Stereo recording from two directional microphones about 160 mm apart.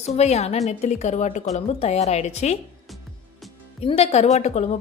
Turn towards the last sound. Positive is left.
turn(degrees=45)  # may be behind; listen again after turning